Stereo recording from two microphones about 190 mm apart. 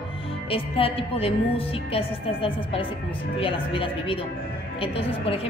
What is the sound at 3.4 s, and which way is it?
A woman's voice, 30° left (ahead or behind).